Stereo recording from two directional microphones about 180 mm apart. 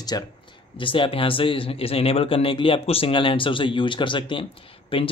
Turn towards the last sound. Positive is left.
turn(degrees=30)  # may be behind; listen again after turning